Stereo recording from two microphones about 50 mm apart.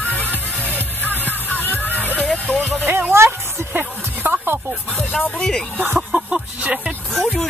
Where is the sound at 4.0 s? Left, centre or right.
Right.